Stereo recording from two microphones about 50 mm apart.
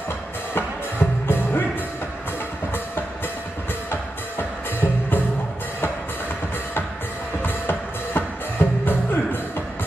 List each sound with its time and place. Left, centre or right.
0.6 s music: left
3.9 s music: left
7.4 s music: left